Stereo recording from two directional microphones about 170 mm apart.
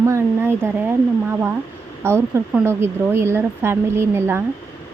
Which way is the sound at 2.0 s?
15° right (ahead or behind).